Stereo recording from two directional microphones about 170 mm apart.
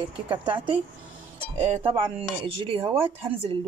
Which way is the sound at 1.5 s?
35° right (ahead or behind).